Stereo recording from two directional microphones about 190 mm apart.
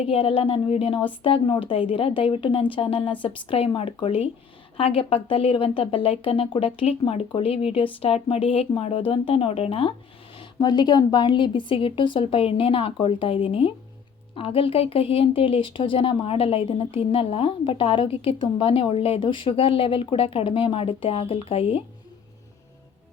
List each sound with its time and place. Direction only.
0.0 s a woman's voice: 30° left (ahead or behind)